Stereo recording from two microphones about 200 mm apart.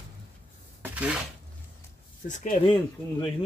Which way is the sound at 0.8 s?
5° right (ahead or behind).